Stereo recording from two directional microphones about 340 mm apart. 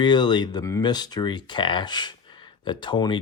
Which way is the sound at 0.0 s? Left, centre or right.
Centre.